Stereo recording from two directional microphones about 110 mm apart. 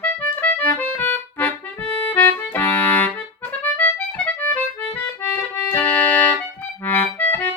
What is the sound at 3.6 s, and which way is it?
Accordion, 15° left (ahead or behind).